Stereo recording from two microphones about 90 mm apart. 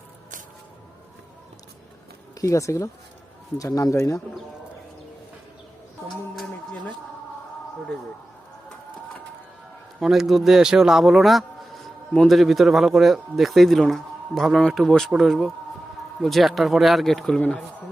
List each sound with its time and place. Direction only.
2.4 s speech: 35° left (ahead or behind)
10.0 s a man's voice: 5° right (ahead or behind)